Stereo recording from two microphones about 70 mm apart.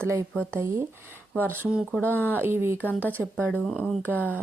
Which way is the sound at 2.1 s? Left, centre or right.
Right.